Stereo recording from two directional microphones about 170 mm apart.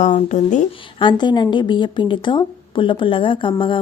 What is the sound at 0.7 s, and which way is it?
Speech, 30° left (ahead or behind).